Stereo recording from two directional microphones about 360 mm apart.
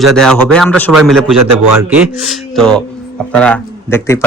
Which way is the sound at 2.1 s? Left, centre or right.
Centre.